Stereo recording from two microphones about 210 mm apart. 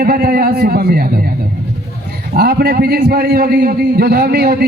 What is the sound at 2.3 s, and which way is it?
A man's voice, 45° right (ahead or behind).